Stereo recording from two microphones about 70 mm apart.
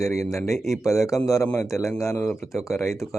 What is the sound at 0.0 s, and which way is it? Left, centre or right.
Speech, left.